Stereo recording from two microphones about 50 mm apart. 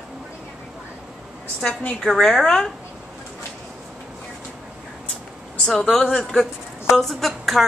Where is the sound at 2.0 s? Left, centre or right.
Centre.